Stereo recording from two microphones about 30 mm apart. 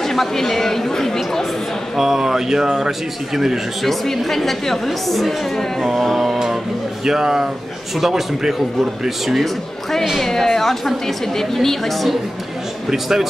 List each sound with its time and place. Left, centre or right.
0.0 s speech: centre
2.0 s a man's voice: centre
3.8 s a woman's voice: centre
7.1 s a man's voice: centre
9.4 s a woman's voice: centre
12.9 s a man's voice: centre